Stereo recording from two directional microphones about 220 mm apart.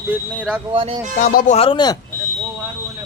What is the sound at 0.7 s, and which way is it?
Speech, 25° right (ahead or behind).